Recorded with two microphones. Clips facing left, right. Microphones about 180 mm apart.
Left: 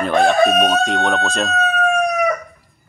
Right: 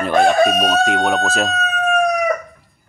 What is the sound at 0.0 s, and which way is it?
Speech, centre (ahead or behind).